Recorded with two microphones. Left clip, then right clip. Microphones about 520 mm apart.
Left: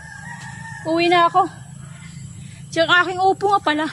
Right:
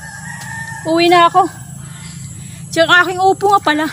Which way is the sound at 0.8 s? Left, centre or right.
Left.